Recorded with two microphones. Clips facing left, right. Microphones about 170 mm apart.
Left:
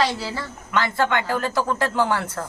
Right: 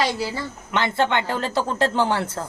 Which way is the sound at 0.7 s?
25° right (ahead or behind).